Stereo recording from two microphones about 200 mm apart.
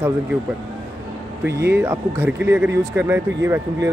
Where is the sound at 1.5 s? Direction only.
55° right (ahead or behind).